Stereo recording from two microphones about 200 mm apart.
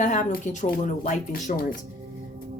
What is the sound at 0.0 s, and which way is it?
Speech, 40° left (ahead or behind).